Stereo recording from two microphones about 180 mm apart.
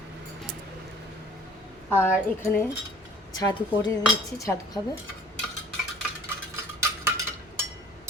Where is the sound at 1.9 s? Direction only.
15° left (ahead or behind).